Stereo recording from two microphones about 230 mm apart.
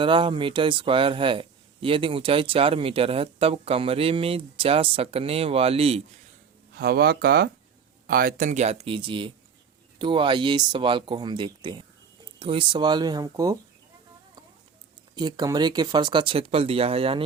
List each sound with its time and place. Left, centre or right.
0.0 s a man's voice: right
6.7 s a man's voice: right; by 13.6 s centre
15.1 s a man's voice: centre